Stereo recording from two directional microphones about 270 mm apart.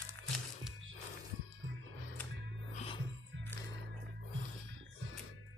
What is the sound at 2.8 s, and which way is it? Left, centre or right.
Music, centre.